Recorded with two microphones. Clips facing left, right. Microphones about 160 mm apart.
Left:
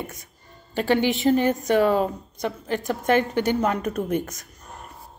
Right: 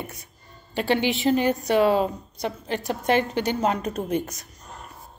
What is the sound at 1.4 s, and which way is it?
A woman's voice, 45° left (ahead or behind).